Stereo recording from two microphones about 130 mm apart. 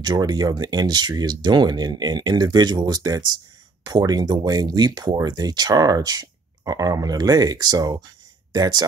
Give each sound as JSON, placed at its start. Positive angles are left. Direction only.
{"t": 0.0, "sound": "speech", "side_deg": -30}